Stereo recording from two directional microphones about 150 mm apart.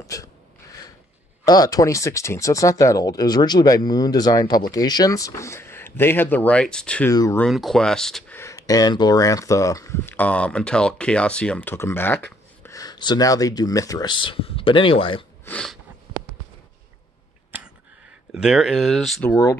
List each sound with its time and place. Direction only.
0.0 s a sound: 20° left (ahead or behind)
1.4 s speech: 25° left (ahead or behind); by 7.1 s 5° left (ahead or behind)
7.1 s speech: 20° left (ahead or behind)
7.3 s speech: centre (ahead or behind)
8.4 s speech: 20° left (ahead or behind)
12.6 s speech: 25° left (ahead or behind)
15.4 s a sound: 5° left (ahead or behind)
17.5 s a sound: 10° right (ahead or behind)
18.3 s speech: 5° right (ahead or behind)